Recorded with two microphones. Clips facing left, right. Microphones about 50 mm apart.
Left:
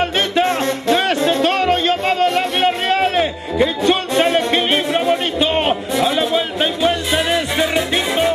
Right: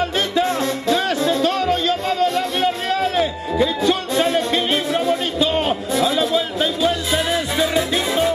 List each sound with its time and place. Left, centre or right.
0.0 s music: left